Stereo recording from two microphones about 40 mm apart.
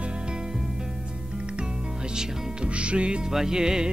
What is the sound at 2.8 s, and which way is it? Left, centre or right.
Speech, right.